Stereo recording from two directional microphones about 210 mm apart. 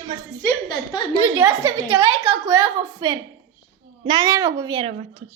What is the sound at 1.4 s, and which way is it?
A woman's voice, 20° right (ahead or behind).